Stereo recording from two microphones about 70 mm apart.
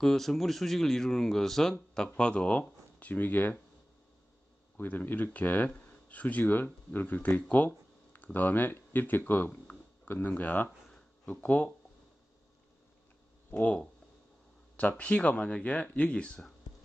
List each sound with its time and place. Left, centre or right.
0.0 s speech: centre; by 3.5 s left
4.7 s speech: left
13.5 s speech: left
14.8 s speech: left